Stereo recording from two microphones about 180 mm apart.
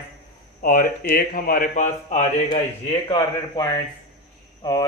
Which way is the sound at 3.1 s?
20° left (ahead or behind).